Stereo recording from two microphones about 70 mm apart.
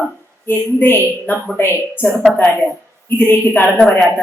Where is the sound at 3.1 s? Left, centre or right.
Left.